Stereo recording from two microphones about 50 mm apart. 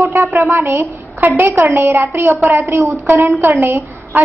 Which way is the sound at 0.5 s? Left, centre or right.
Right.